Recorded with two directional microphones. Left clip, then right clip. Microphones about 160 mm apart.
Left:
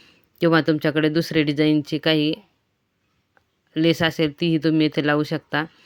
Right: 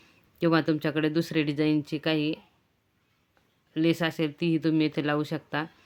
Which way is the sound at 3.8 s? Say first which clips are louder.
Left 7 dB; 40° left (ahead or behind).